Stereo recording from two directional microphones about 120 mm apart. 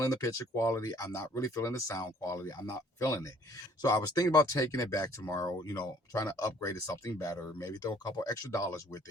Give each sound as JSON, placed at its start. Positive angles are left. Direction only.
{"t": 0.0, "sound": "speech", "side_deg": 25}